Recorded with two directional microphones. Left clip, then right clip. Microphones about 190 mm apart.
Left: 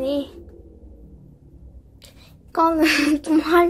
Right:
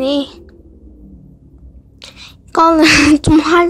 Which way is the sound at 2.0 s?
20° right (ahead or behind).